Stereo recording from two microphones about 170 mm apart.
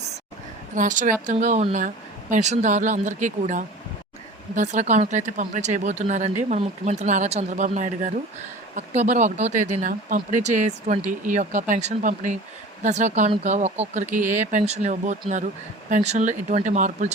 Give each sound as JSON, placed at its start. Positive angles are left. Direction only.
{"t": 0.8, "sound": "speech", "side_deg": -50}